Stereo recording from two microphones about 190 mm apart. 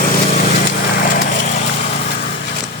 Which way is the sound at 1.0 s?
45° left (ahead or behind).